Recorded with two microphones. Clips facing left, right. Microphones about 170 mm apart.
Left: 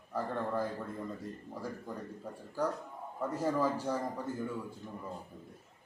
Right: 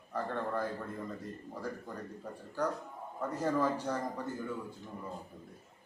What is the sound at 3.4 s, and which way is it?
Speech, 5° left (ahead or behind).